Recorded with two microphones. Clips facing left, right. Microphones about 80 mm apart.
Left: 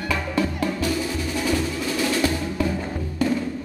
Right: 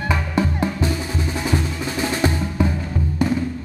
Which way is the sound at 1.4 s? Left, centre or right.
Right.